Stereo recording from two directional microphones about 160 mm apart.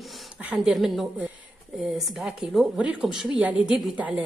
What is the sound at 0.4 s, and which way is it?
A woman's voice, 5° right (ahead or behind).